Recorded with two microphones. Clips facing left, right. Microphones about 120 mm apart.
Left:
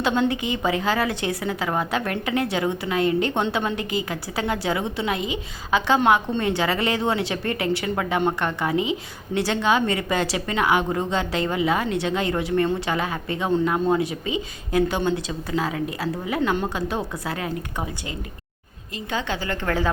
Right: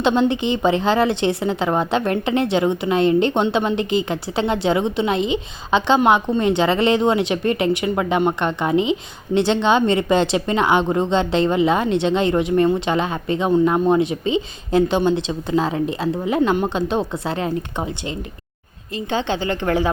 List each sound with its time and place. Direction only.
0.0 s speech: 25° right (ahead or behind)
18.9 s speech: 25° right (ahead or behind)